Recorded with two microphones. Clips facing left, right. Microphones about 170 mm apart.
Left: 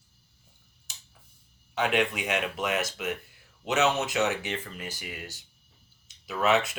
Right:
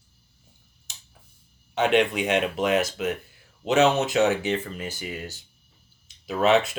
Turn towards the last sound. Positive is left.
turn(degrees=-30)  # may be behind; listen again after turning